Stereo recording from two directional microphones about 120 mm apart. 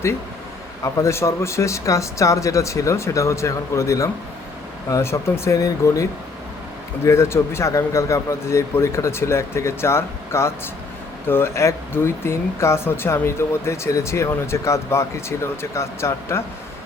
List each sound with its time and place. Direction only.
0.9 s speech: 25° left (ahead or behind)